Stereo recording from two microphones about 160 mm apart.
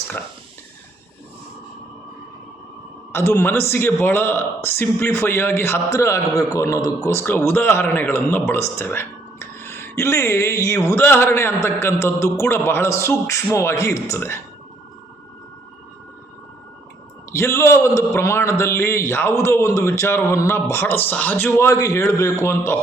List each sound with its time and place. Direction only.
3.1 s a man's voice: 15° left (ahead or behind)
17.3 s a man's voice: 15° left (ahead or behind)